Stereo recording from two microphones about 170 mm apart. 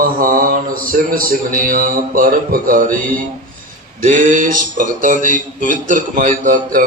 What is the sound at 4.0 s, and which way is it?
Speech, 50° right (ahead or behind).